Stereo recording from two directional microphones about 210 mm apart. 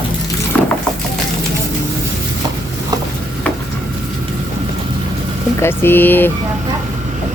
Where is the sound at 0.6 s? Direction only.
5° left (ahead or behind).